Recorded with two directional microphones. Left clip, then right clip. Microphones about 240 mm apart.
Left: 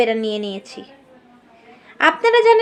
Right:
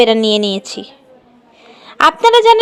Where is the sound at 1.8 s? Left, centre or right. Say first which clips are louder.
Right 5 dB; right.